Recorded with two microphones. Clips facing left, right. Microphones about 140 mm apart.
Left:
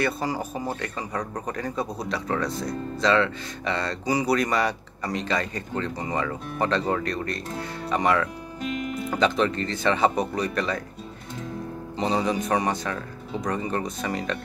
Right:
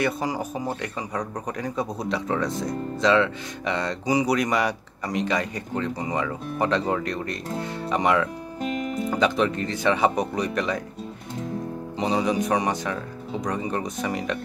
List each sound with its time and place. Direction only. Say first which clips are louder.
0.0 s speech: right 1 dB; 15° right (ahead or behind)
8.5 s music: right 2 dB; 40° right (ahead or behind)
9.1 s speech: even; 10° right (ahead or behind)
12.0 s speech: right 1 dB; 15° right (ahead or behind)